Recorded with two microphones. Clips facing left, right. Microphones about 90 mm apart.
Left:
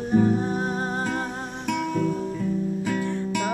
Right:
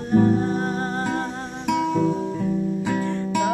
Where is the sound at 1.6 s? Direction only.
20° right (ahead or behind).